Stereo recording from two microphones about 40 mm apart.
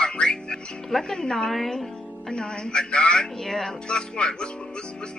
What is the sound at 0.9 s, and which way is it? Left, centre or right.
Speech, centre.